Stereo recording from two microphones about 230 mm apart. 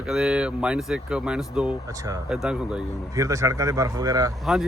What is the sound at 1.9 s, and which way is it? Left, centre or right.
Speech, centre.